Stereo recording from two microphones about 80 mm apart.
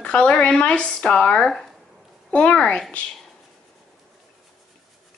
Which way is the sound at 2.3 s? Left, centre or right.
Centre.